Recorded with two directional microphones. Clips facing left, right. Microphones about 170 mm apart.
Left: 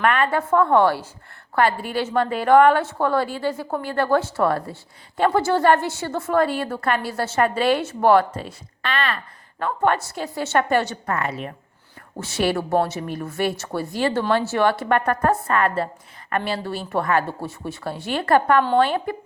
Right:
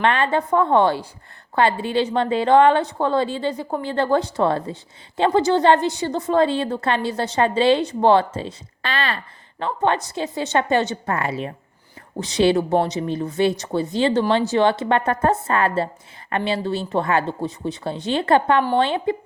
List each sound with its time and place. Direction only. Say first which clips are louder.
0.0 s a woman's voice: right 1 dB; 25° right (ahead or behind)